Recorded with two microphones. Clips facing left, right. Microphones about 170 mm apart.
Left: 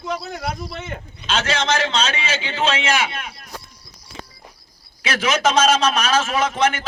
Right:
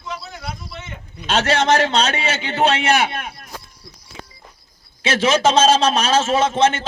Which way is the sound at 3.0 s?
45° right (ahead or behind).